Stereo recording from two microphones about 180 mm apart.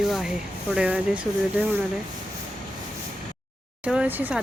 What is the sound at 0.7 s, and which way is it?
Speech, 5° right (ahead or behind).